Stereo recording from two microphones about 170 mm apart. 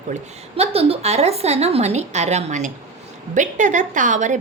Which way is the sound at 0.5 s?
35° right (ahead or behind).